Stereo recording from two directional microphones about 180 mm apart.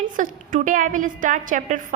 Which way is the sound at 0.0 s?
45° right (ahead or behind).